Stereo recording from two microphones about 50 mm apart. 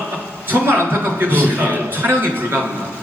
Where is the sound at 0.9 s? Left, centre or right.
Right.